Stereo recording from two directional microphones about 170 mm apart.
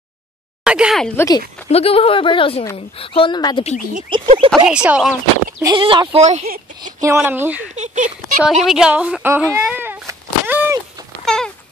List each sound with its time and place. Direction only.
0.7 s speech: 5° right (ahead or behind)
1.1 s speech: 20° left (ahead or behind)
1.7 s a woman's voice: 35° left (ahead or behind)
4.1 s speech: 30° right (ahead or behind)
4.6 s speech: 5° right (ahead or behind)
5.6 s speech: 25° right (ahead or behind)
6.8 s speech: 20° right (ahead or behind)
7.7 s speech: 45° right (ahead or behind)
8.5 s speech: centre (ahead or behind)
11.2 s a sound: 5° left (ahead or behind)